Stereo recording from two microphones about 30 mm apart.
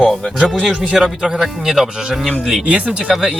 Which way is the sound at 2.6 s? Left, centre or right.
Right.